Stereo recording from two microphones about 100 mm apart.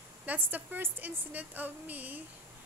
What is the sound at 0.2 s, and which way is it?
A woman's voice, 15° right (ahead or behind).